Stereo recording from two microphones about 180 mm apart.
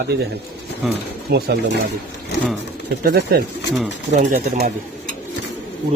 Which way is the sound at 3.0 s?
60° right (ahead or behind).